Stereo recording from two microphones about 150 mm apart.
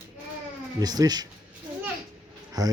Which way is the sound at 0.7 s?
25° right (ahead or behind).